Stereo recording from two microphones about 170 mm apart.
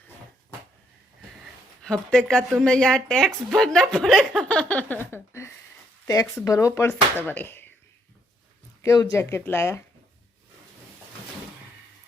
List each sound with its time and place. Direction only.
1.8 s a woman's voice: 5° left (ahead or behind)
8.8 s speech: 20° left (ahead or behind)